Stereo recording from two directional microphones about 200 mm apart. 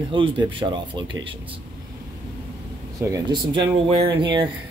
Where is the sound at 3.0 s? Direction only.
20° right (ahead or behind).